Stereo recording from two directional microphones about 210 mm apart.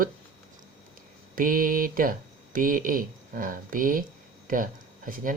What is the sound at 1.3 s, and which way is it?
Speech, 40° right (ahead or behind).